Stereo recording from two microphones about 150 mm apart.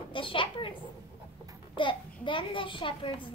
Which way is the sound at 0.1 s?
35° left (ahead or behind).